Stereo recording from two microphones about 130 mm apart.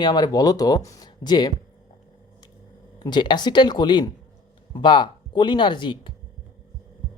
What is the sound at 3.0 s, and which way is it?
Speech, 35° left (ahead or behind).